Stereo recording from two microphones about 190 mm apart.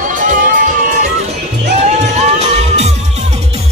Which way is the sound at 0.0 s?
45° right (ahead or behind).